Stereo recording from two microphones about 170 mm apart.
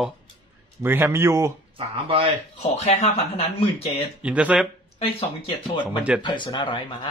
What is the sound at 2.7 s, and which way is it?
Speech, 45° left (ahead or behind).